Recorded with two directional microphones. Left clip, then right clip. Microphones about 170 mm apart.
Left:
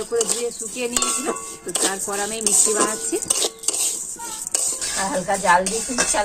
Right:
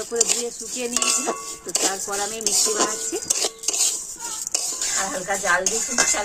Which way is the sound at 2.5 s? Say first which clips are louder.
Left 2 dB; 15° right (ahead or behind).